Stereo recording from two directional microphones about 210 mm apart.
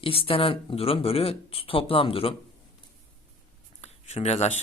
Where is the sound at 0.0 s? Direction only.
25° left (ahead or behind).